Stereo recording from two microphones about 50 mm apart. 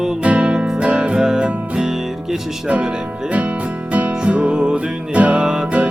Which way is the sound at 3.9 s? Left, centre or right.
Right.